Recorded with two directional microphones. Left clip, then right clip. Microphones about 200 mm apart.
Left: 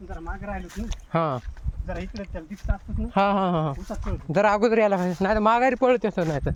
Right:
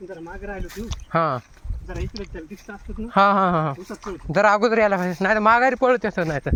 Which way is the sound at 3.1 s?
5° right (ahead or behind).